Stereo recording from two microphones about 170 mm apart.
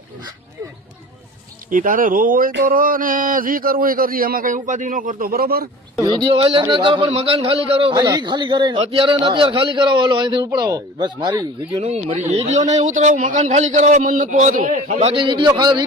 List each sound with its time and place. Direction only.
1.7 s a man's voice: 55° right (ahead or behind)
6.0 s a man's voice: 25° right (ahead or behind)
11.8 s a man's voice: 35° right (ahead or behind)